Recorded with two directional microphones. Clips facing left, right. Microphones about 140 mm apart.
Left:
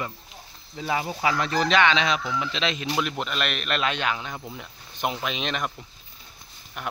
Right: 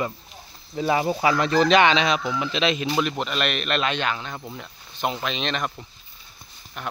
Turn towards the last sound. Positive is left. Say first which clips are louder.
# right 2 dB
turn(degrees=10)  # may be behind; listen again after turning